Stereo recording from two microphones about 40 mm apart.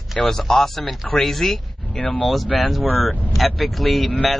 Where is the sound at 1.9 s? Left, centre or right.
Left.